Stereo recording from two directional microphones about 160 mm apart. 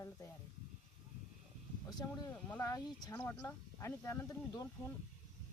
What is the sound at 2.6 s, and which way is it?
Speech, 20° left (ahead or behind).